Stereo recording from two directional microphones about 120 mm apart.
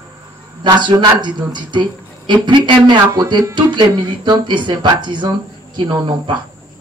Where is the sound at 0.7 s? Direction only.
40° right (ahead or behind).